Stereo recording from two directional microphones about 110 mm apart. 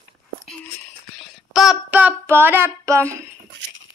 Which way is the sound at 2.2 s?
20° right (ahead or behind).